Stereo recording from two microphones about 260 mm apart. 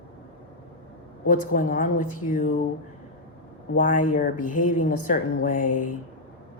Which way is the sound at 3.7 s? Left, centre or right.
Left.